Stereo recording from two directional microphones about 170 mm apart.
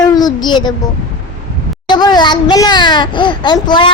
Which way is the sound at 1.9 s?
25° left (ahead or behind).